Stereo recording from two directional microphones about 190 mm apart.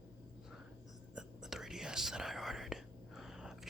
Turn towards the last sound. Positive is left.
turn(degrees=-5)  # may be behind; listen again after turning